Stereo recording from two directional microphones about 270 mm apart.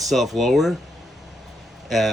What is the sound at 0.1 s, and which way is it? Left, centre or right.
Speech, centre.